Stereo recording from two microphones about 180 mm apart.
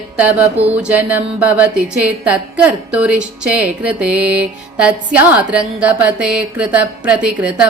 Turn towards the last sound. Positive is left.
turn(degrees=-5)  # may be behind; listen again after turning